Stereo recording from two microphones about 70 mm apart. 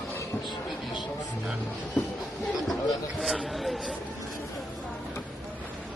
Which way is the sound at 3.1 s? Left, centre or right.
Centre.